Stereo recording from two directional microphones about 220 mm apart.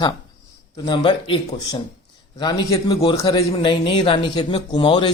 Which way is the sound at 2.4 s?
15° left (ahead or behind).